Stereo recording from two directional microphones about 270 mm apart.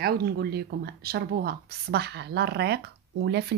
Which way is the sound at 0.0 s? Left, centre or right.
Right.